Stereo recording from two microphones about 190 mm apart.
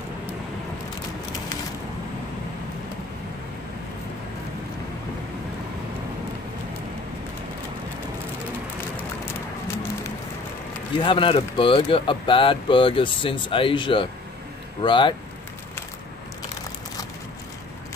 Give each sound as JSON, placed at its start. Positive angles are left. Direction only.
{"t": 11.0, "sound": "speech", "side_deg": 25}